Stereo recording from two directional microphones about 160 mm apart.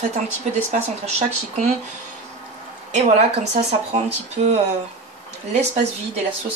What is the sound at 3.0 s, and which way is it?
Speech, 45° right (ahead or behind).